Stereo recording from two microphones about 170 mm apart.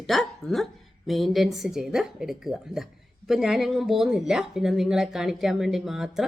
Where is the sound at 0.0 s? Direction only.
Centre (ahead or behind).